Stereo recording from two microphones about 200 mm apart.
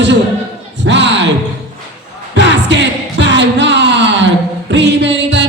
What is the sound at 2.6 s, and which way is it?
Music, 60° right (ahead or behind).